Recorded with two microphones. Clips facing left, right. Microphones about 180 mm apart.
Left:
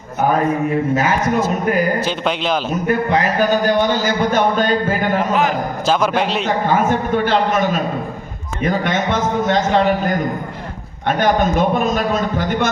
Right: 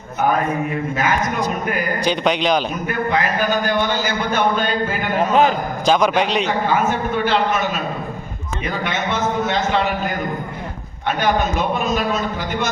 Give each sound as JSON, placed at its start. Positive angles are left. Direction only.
{"t": 2.0, "sound": "a man's voice", "side_deg": 5}
{"t": 2.8, "sound": "a man's voice", "side_deg": 35}
{"t": 5.3, "sound": "a man's voice", "side_deg": -25}
{"t": 5.8, "sound": "a man's voice", "side_deg": 5}
{"t": 6.4, "sound": "speech", "side_deg": 45}
{"t": 11.2, "sound": "speech", "side_deg": 45}